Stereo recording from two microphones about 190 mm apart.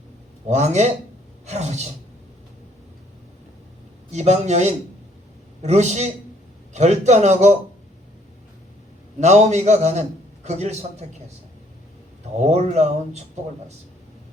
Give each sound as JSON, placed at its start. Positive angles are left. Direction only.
{"t": 0.4, "sound": "a man's voice", "side_deg": -35}
{"t": 4.1, "sound": "a man's voice", "side_deg": -35}
{"t": 9.2, "sound": "a man's voice", "side_deg": -35}
{"t": 12.4, "sound": "a man's voice", "side_deg": -35}